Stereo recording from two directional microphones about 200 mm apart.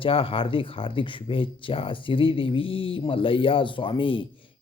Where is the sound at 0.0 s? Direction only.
25° left (ahead or behind).